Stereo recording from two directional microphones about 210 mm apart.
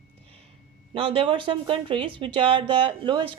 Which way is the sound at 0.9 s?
25° right (ahead or behind).